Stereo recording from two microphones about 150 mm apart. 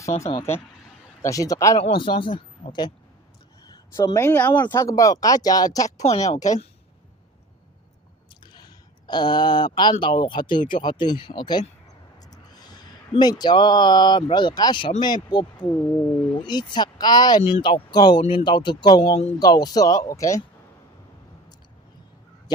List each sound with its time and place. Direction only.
1.2 s speech: 20° left (ahead or behind)
2.0 s speech: 35° left (ahead or behind)
6.0 s speech: 50° left (ahead or behind)
8.4 s speech: 30° left (ahead or behind)